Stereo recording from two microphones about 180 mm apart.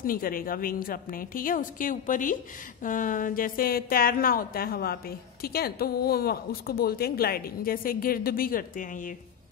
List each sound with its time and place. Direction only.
0.0 s a woman's voice: 50° left (ahead or behind)